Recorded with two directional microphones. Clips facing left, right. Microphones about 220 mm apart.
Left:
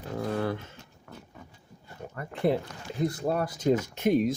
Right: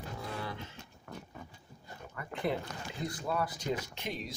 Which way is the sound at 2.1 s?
40° left (ahead or behind).